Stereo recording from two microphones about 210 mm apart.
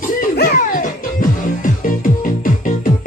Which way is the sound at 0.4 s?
45° left (ahead or behind).